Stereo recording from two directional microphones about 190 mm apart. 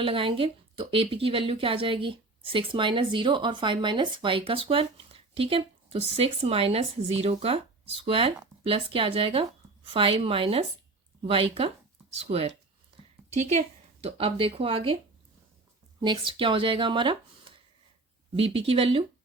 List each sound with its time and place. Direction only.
0.0 s a woman's voice: 30° right (ahead or behind)
16.0 s speech: 25° right (ahead or behind)